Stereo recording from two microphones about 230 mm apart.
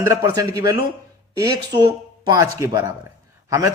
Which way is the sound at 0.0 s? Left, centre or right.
Centre.